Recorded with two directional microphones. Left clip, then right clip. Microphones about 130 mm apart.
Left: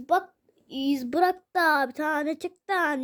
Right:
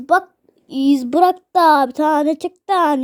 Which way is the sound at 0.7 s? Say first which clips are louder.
Right 11 dB; 35° right (ahead or behind).